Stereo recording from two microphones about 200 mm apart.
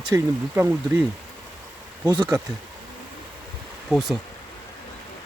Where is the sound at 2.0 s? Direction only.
20° right (ahead or behind).